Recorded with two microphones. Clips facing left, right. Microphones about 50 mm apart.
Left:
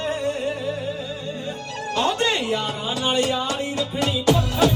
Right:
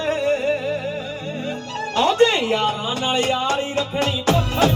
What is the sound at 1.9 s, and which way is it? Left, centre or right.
Music, right.